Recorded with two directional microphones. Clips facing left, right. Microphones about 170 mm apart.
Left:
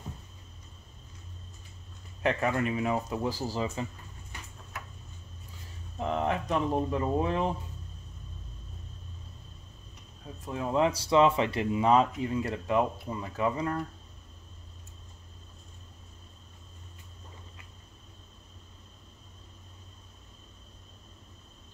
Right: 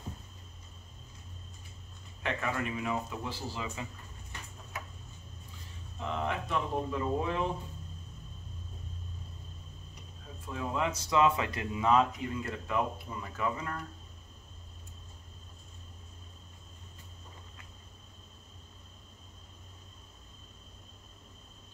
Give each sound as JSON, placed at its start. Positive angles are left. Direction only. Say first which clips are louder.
{"t": 2.5, "sound": "speech", "louder": "left 5 dB", "side_deg": 30}
{"t": 5.9, "sound": "speech", "louder": "left 5 dB", "side_deg": 35}
{"t": 10.4, "sound": "speech", "louder": "left 6 dB", "side_deg": 30}